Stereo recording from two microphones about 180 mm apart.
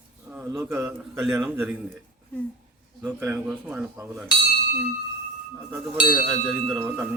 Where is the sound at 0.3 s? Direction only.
10° right (ahead or behind).